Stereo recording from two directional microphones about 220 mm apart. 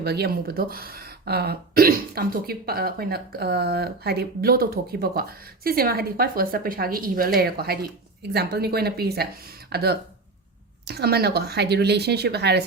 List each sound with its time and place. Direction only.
0.0 s speech: 45° right (ahead or behind)